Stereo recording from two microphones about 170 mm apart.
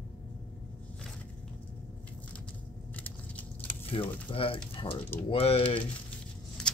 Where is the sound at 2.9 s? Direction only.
10° left (ahead or behind).